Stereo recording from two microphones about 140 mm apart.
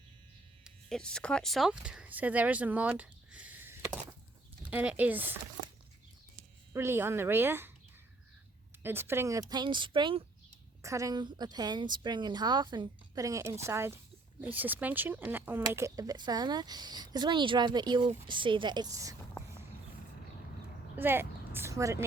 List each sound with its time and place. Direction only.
0.6 s speech: 5° left (ahead or behind); by 5.4 s 15° right (ahead or behind)
6.7 s speech: 15° right (ahead or behind)
8.8 s a woman's voice: 15° right (ahead or behind); by 10.2 s 35° right (ahead or behind)
10.8 s a woman's voice: 25° right (ahead or behind)
20.9 s a woman's voice: 15° right (ahead or behind)